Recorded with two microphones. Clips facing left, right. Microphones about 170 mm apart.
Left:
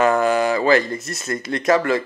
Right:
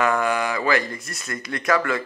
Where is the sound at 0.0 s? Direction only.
30° left (ahead or behind).